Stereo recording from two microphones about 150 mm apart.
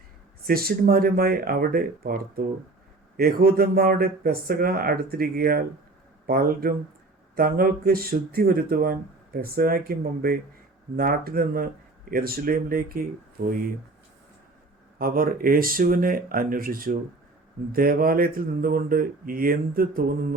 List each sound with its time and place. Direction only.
0.4 s speech: 80° right
13.4 s speech: 90° right
14.9 s speech: 75° right (ahead or behind)